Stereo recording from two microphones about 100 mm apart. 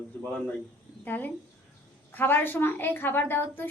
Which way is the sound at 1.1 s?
20° left (ahead or behind).